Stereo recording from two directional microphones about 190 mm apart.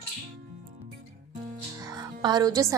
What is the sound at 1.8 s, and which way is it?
Music, 20° right (ahead or behind).